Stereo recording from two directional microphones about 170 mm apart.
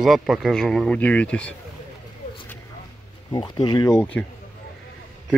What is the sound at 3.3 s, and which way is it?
Speech, 25° left (ahead or behind).